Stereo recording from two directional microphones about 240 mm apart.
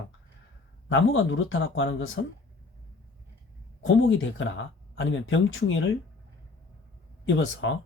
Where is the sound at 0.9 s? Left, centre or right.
Left.